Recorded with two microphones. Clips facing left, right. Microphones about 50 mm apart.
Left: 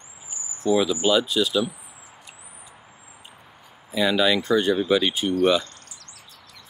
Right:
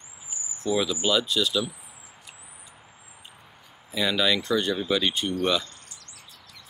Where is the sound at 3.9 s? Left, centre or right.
Centre.